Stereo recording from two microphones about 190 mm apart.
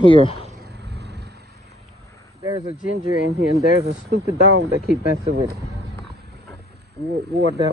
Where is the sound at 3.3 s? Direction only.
60° right (ahead or behind).